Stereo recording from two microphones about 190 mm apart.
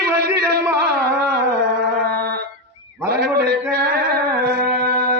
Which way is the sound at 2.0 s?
55° right (ahead or behind).